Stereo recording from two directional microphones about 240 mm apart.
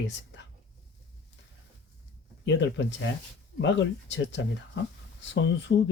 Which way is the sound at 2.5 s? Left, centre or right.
Left.